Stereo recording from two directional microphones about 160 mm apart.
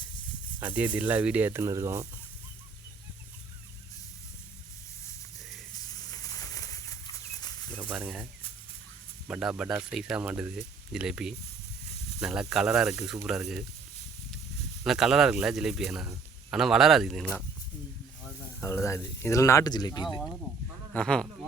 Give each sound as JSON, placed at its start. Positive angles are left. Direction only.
{"t": 0.6, "sound": "speech", "side_deg": -10}
{"t": 5.7, "sound": "a sound", "side_deg": 25}
{"t": 7.9, "sound": "speech", "side_deg": -5}
{"t": 14.8, "sound": "speech", "side_deg": 0}
{"t": 18.6, "sound": "speech", "side_deg": 15}
{"t": 20.9, "sound": "speech", "side_deg": 5}